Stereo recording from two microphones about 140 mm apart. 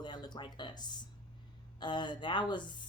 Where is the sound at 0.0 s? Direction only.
30° left (ahead or behind).